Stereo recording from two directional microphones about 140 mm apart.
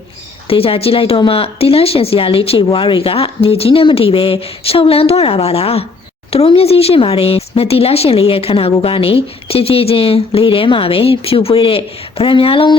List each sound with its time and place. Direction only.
0.4 s speech: 40° left (ahead or behind)